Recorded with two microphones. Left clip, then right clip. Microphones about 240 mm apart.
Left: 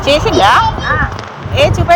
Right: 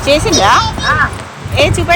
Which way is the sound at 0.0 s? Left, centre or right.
Centre.